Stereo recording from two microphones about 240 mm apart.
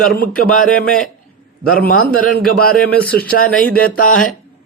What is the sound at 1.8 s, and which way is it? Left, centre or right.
Speech, left.